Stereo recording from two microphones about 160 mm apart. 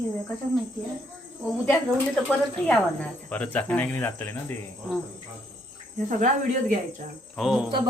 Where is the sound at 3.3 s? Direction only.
10° left (ahead or behind).